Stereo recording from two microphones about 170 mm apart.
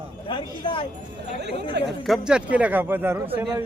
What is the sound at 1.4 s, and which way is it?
Speech, 90° right.